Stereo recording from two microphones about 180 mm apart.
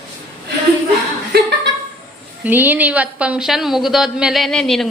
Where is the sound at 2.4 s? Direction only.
10° right (ahead or behind).